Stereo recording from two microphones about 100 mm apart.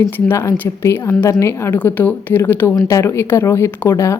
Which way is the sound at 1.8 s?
15° left (ahead or behind).